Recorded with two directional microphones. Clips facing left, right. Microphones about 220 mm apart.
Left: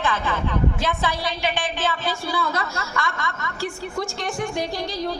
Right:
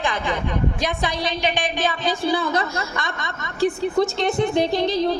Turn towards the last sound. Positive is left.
turn(degrees=-25)  # may be behind; listen again after turning